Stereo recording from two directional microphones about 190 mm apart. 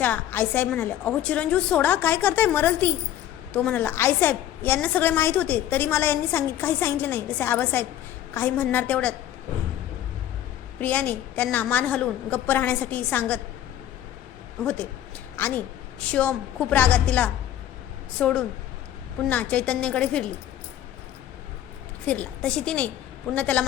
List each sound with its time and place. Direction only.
0.0 s a woman's voice: 10° left (ahead or behind)
10.8 s a woman's voice: 10° left (ahead or behind)
14.6 s a woman's voice: 5° left (ahead or behind)
22.0 s a woman's voice: 5° left (ahead or behind)